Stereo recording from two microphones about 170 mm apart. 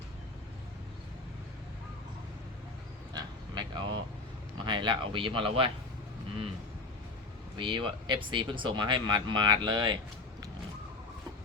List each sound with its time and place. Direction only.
3.1 s a sound: 25° right (ahead or behind)
4.6 s speech: 30° right (ahead or behind)
7.5 s speech: 30° right (ahead or behind)